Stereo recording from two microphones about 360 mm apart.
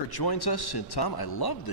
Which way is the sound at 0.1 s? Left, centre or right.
Left.